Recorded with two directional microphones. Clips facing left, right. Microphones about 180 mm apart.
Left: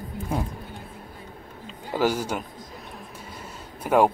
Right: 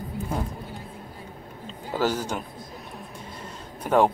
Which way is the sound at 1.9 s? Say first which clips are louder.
Left 2 dB; 10° left (ahead or behind).